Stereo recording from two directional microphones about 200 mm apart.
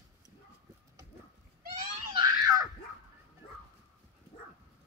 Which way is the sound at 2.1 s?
15° right (ahead or behind).